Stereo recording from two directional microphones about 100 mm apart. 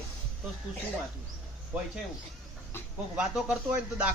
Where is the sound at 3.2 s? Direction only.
10° right (ahead or behind).